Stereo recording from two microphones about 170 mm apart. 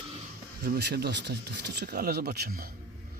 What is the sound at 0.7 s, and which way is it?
Speech, 75° right (ahead or behind).